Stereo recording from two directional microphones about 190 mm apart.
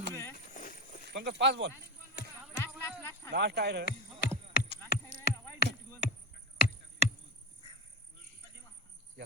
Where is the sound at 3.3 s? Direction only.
60° right (ahead or behind).